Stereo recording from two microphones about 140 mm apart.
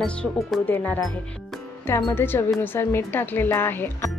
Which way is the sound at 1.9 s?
30° left (ahead or behind).